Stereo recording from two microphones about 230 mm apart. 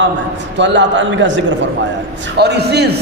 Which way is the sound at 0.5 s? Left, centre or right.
Right.